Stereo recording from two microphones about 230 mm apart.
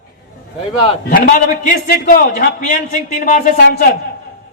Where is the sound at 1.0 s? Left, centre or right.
Left.